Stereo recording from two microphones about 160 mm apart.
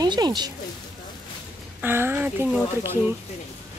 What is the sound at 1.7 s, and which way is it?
Speech, 15° right (ahead or behind).